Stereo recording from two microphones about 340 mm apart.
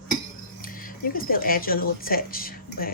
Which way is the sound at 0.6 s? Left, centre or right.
Left.